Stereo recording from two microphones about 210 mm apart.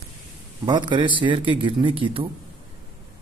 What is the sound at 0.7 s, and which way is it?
A man's voice, 20° right (ahead or behind).